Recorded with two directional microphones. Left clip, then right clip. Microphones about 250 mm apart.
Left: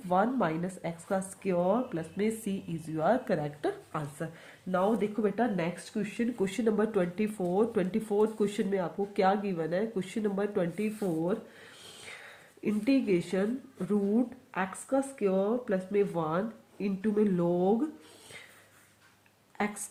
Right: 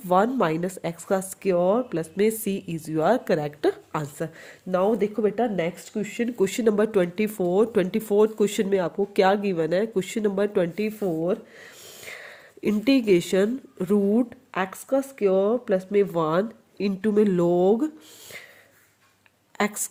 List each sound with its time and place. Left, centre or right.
0.1 s speech: right
19.6 s a woman's voice: right